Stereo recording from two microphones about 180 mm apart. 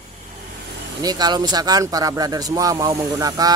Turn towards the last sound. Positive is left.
turn(degrees=-20)  # may be behind; listen again after turning